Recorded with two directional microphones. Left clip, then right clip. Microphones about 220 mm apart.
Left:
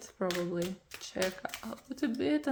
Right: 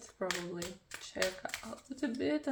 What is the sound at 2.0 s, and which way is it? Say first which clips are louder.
Speech: left 3 dB; 40° left (ahead or behind).